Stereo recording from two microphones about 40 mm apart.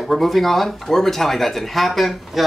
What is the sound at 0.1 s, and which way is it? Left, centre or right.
Speech, centre.